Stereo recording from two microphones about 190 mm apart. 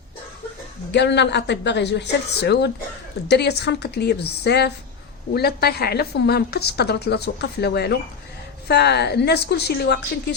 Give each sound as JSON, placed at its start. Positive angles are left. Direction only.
{"t": 0.9, "sound": "a woman's voice", "side_deg": 65}